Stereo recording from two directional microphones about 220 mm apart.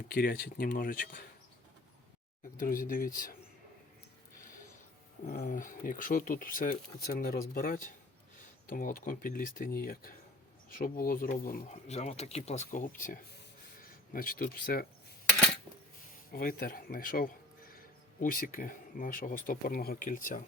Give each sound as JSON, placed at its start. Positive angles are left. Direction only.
{"t": 0.1, "sound": "speech", "side_deg": 45}
{"t": 2.6, "sound": "speech", "side_deg": 40}
{"t": 5.2, "sound": "speech", "side_deg": 40}
{"t": 16.3, "sound": "speech", "side_deg": 40}